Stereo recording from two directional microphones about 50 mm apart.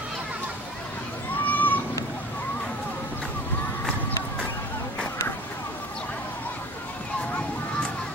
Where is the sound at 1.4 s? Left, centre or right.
Left.